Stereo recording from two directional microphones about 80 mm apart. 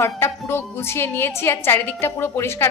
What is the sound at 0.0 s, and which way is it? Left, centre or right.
A woman's voice, left.